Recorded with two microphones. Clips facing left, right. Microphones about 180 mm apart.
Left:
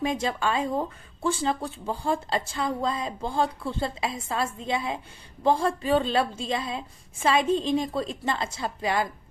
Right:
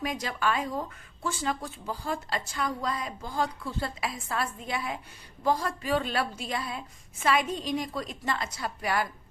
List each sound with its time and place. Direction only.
0.0 s speech: 25° left (ahead or behind)